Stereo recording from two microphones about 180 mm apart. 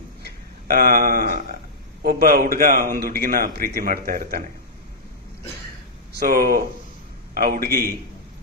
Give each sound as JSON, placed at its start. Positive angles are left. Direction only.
{"t": 0.3, "sound": "a sound", "side_deg": -55}
{"t": 2.0, "sound": "a man's voice", "side_deg": -55}
{"t": 6.1, "sound": "a man's voice", "side_deg": -55}